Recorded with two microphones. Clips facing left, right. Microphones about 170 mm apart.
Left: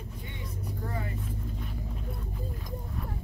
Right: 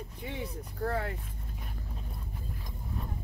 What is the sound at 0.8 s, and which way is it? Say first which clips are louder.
Speech: right 6 dB; 70° right (ahead or behind).